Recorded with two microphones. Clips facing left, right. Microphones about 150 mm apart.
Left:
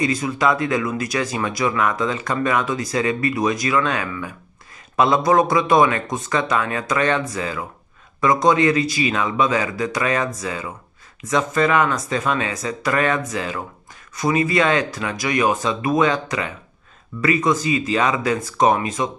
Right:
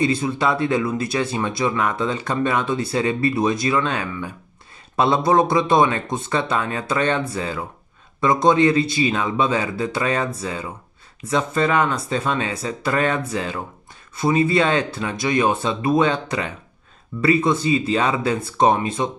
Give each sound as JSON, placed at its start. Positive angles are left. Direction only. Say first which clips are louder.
{"t": 0.0, "sound": "speech", "louder": "even", "side_deg": -30}